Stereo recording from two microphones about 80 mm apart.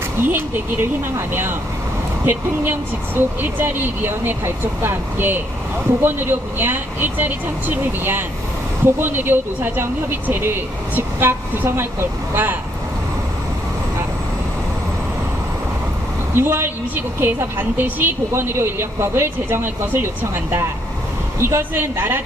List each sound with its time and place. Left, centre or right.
0.3 s a woman's voice: right
16.3 s a woman's voice: right